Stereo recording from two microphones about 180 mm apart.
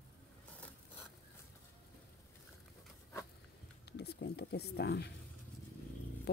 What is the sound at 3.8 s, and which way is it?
Speech, 65° left (ahead or behind).